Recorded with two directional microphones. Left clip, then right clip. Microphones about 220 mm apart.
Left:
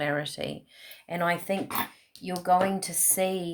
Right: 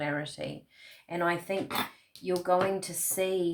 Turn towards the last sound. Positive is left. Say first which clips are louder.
# left 1 dB
turn(degrees=45)  # may be behind; listen again after turning